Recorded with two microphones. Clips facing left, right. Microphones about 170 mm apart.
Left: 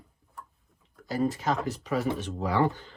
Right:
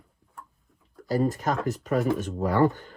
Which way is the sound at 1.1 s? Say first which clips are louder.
Right 2 dB; 40° right (ahead or behind).